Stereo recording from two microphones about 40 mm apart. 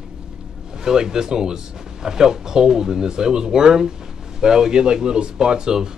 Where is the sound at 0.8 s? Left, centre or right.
Centre.